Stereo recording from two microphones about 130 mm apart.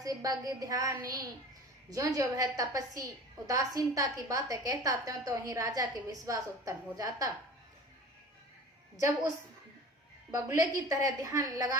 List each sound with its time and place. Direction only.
0.0 s a woman's voice: 30° right (ahead or behind)
9.0 s a woman's voice: 25° right (ahead or behind)
10.3 s a woman's voice: 25° right (ahead or behind)